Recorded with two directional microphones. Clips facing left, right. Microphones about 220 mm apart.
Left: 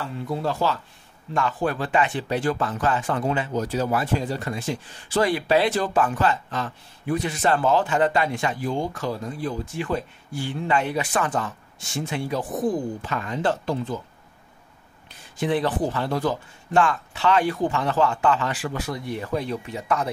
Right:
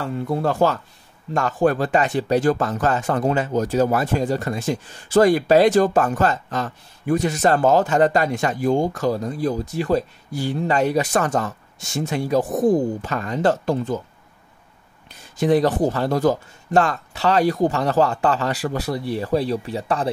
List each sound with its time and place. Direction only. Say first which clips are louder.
0.0 s speech: right 5 dB; 55° right (ahead or behind)
15.3 s speech: right 6 dB; 40° right (ahead or behind)